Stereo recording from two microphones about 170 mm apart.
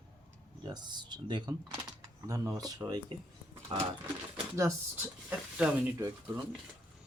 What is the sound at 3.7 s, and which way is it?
Dog, 30° right (ahead or behind).